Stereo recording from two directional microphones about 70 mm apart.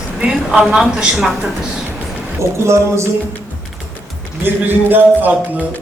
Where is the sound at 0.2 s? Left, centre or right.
Centre.